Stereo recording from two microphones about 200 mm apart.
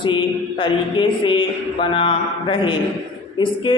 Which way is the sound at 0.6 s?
25° left (ahead or behind).